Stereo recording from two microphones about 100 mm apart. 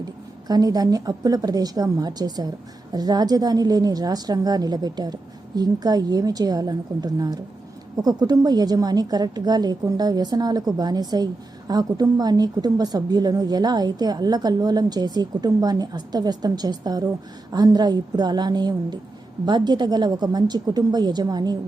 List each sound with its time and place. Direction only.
0.4 s a woman's voice: 40° right (ahead or behind)